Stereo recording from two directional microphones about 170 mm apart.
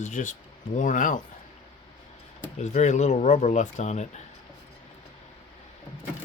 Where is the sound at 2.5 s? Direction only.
45° left (ahead or behind).